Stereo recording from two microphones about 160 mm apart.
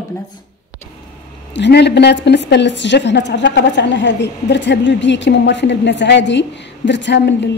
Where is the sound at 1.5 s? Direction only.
90° left.